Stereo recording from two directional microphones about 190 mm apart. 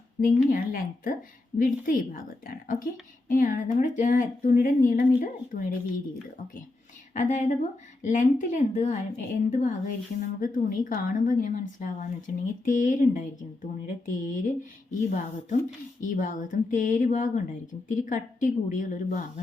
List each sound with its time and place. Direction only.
0.2 s a woman's voice: 45° left (ahead or behind)
7.1 s a woman's voice: 40° left (ahead or behind)